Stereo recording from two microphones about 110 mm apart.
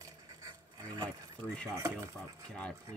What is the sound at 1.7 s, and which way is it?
Speech, 30° right (ahead or behind).